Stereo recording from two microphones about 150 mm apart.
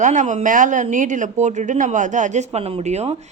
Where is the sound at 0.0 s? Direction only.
55° right (ahead or behind).